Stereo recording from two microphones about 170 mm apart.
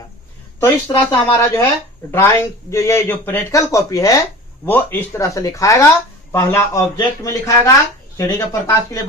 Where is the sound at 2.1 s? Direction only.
15° left (ahead or behind).